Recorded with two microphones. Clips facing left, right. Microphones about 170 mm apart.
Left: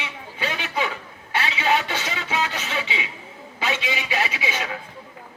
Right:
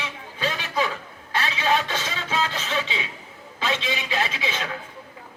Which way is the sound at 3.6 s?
10° left (ahead or behind).